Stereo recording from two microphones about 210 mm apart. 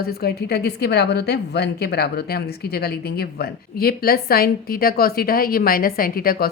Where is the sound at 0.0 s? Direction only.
50° left (ahead or behind).